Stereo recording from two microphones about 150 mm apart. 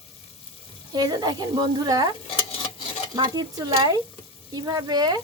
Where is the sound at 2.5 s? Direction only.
35° left (ahead or behind).